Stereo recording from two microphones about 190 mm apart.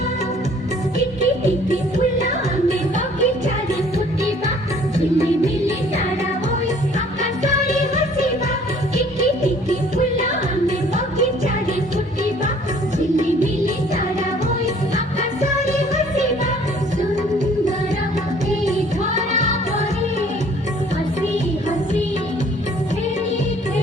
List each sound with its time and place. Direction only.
1.7 s music: 40° right (ahead or behind)
9.0 s music: 40° right (ahead or behind)
13.1 s music: 40° right (ahead or behind)
15.6 s music: 35° right (ahead or behind)
18.6 s music: 40° right (ahead or behind)